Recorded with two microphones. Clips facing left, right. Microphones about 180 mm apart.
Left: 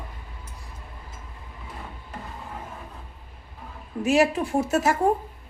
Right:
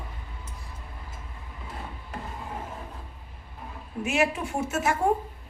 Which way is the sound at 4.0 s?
35° left (ahead or behind).